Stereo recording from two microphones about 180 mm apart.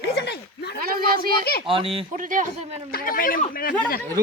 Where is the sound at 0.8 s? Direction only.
55° right (ahead or behind).